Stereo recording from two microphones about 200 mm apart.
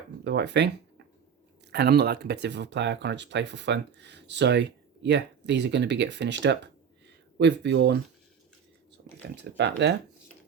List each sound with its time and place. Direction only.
0.3 s speech: 60° right (ahead or behind)
9.0 s a sound: 55° right (ahead or behind)
9.3 s speech: 60° right (ahead or behind)